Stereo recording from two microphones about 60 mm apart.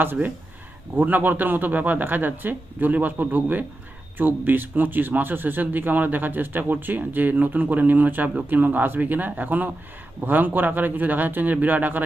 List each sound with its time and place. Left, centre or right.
0.0 s speech: right